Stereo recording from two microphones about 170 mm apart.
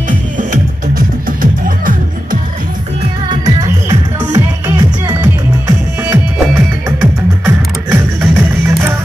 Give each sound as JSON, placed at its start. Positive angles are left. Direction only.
{"t": 0.4, "sound": "music", "side_deg": -50}
{"t": 3.3, "sound": "music", "side_deg": -25}